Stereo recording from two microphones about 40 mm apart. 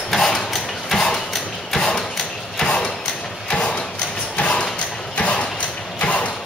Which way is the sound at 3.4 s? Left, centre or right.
Left.